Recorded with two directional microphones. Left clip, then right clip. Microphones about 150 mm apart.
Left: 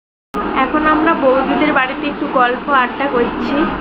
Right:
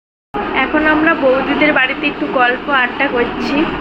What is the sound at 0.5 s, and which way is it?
Speech, 10° left (ahead or behind).